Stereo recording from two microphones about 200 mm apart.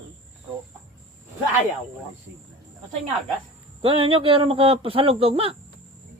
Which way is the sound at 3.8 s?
25° right (ahead or behind).